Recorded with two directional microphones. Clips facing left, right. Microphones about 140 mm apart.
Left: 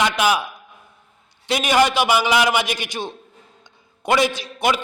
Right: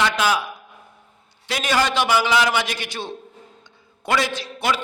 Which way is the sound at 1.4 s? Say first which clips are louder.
Left 4 dB; 20° left (ahead or behind).